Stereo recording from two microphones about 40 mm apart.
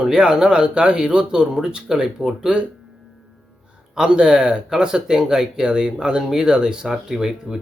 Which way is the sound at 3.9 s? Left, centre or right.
Centre.